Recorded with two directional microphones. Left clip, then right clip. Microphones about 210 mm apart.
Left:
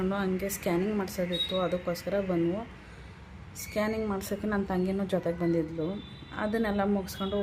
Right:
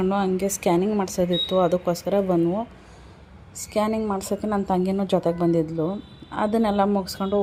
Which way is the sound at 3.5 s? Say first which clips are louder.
Right 7 dB; 25° right (ahead or behind).